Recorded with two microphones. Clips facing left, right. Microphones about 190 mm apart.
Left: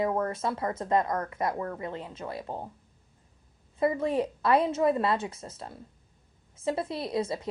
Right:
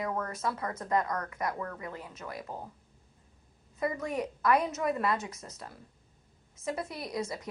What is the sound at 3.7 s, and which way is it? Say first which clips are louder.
A woman's voice: left 6 dB; 30° left (ahead or behind).